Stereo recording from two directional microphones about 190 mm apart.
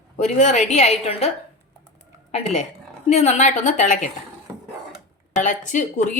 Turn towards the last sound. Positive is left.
turn(degrees=40)  # may be behind; listen again after turning